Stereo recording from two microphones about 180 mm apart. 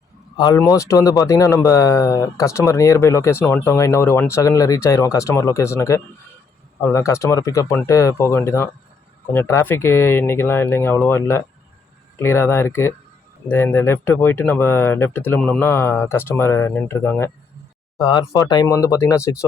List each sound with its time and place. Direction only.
0.3 s speech: 25° left (ahead or behind)